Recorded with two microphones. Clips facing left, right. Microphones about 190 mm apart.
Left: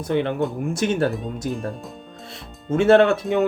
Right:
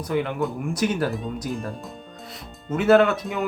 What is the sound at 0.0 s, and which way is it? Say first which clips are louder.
Speech: left 3 dB; 25° left (ahead or behind).